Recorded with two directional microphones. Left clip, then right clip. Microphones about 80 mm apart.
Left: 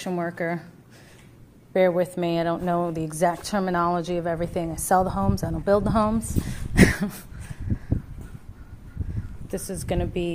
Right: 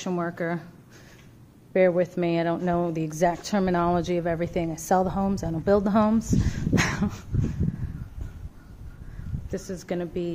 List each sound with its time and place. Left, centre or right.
0.2 s speech: right
1.7 s a woman's voice: right
3.5 s a woman's voice: right
4.6 s a woman's voice: right
5.6 s speech: right
6.8 s dog: right
9.5 s a woman's voice: centre